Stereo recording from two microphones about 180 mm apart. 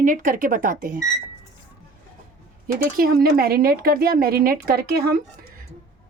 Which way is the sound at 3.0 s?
55° right (ahead or behind).